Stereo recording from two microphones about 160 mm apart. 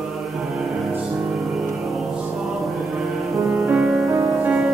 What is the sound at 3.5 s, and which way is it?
Music, 10° right (ahead or behind).